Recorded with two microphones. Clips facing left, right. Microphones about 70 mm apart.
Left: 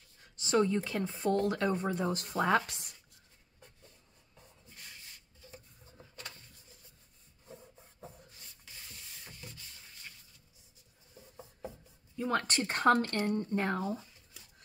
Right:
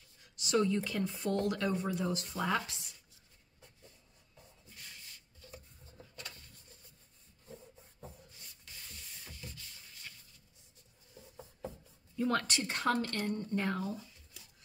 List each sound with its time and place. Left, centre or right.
0.2 s speech: left
12.2 s speech: centre
12.4 s speech: left
13.4 s speech: left